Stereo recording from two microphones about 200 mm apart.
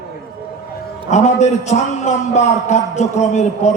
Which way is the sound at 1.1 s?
35° left (ahead or behind).